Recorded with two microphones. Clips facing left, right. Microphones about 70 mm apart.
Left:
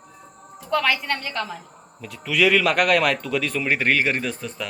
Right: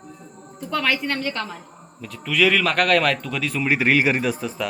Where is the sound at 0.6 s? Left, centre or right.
Centre.